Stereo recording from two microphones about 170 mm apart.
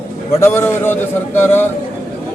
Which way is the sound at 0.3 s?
15° left (ahead or behind).